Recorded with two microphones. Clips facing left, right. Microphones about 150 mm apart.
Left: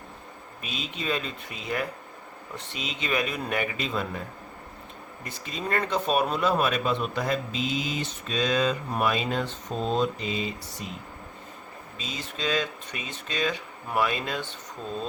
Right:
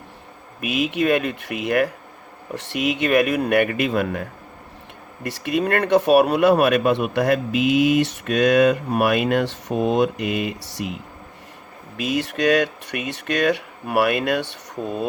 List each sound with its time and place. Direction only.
0.6 s a man's voice: 70° right (ahead or behind)
11.9 s speech: 70° right (ahead or behind)